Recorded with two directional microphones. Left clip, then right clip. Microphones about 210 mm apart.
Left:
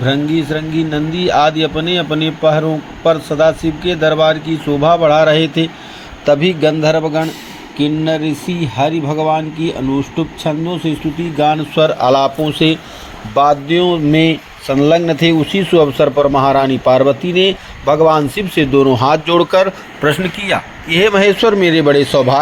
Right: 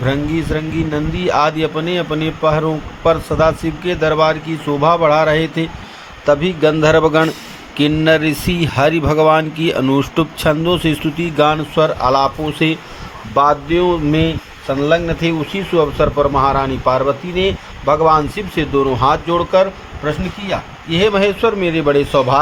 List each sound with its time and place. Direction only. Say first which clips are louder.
0.0 s speech: left 3 dB; centre (ahead or behind)
6.7 s speech: right 2 dB; 20° right (ahead or behind)
11.3 s speech: even; 10° right (ahead or behind)
11.7 s speech: left 2 dB; 5° left (ahead or behind)